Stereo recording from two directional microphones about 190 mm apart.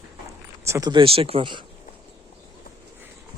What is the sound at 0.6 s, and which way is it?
Speech, 15° right (ahead or behind).